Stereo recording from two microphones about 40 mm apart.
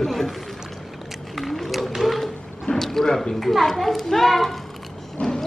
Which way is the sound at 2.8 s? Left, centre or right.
Centre.